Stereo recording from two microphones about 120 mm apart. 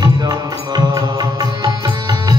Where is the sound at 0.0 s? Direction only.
35° right (ahead or behind).